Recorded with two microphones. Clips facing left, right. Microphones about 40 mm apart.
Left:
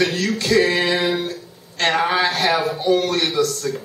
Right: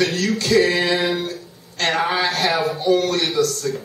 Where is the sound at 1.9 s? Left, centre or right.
Centre.